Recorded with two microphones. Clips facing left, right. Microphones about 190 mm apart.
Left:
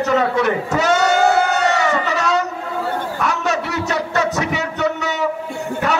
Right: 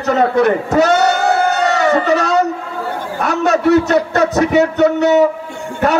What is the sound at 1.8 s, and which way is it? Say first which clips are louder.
Speech: right 6 dB; 35° right (ahead or behind).